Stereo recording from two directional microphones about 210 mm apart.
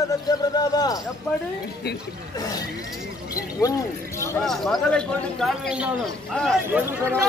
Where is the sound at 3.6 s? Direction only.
15° left (ahead or behind).